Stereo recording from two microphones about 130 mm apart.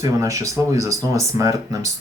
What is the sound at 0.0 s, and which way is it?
Speech, 25° right (ahead or behind).